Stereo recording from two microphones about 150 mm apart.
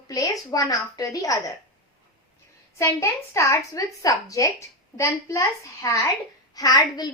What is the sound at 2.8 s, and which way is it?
A woman's voice, 20° left (ahead or behind).